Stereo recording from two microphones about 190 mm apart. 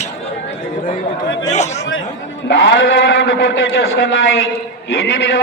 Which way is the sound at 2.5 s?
70° left (ahead or behind).